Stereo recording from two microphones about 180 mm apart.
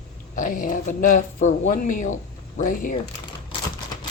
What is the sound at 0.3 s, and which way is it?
Speech, 50° left (ahead or behind).